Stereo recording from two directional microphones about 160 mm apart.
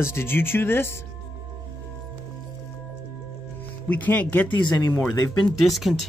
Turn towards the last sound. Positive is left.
turn(degrees=0)  # may be behind; listen again after turning